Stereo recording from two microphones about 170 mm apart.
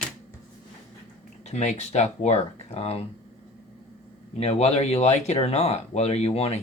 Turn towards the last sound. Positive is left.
turn(degrees=35)  # may be behind; listen again after turning